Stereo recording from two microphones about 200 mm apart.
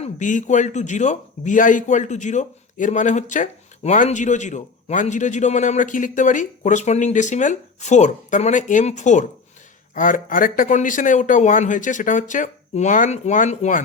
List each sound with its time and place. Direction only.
0.0 s a man's voice: 40° left (ahead or behind)